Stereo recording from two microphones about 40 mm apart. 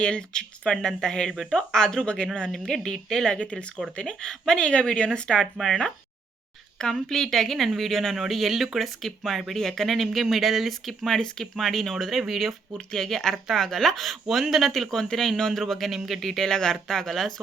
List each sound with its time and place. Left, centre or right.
0.0 s speech: left
2.8 s speech: centre
3.3 s speech: left
3.9 s speech: centre
5.5 s speech: centre
6.9 s speech: centre
8.8 s speech: centre
12.7 s speech: centre
16.3 s speech: centre